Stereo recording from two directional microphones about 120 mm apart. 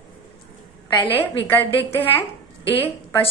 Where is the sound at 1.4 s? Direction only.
15° left (ahead or behind).